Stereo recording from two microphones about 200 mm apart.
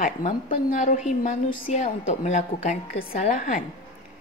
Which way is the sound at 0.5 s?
40° left (ahead or behind).